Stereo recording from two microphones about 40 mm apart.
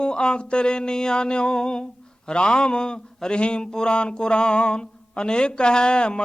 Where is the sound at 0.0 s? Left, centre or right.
Left.